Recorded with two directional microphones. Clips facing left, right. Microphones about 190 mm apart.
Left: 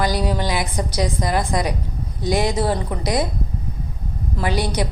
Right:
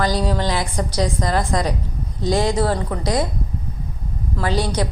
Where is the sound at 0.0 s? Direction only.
10° left (ahead or behind).